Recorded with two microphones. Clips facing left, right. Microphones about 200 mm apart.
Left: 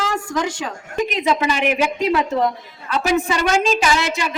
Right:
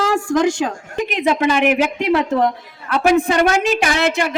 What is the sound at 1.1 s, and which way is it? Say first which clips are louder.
A woman's voice: right 5 dB; 55° right (ahead or behind).